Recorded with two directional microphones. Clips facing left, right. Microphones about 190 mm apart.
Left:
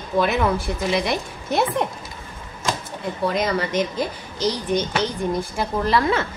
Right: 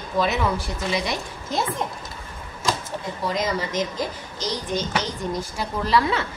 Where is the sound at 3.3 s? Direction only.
60° left (ahead or behind).